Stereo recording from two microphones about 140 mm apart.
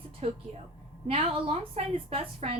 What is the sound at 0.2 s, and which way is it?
A woman's voice, 50° right (ahead or behind).